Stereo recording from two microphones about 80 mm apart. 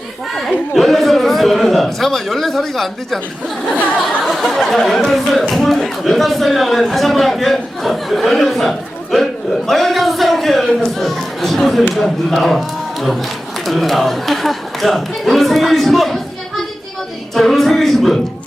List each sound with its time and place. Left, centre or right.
0.7 s speech: centre
4.2 s speech: centre
9.6 s a sound: centre
13.7 s speech: centre
17.3 s speech: centre